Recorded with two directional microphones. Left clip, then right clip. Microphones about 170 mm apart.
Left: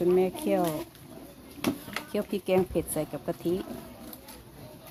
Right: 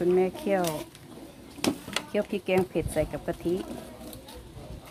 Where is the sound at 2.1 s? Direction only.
15° left (ahead or behind).